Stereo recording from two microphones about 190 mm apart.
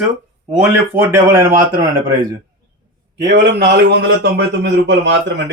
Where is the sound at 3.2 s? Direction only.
55° right (ahead or behind).